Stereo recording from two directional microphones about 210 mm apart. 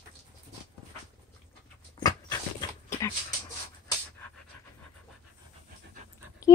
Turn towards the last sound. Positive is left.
turn(degrees=15)  # may be behind; listen again after turning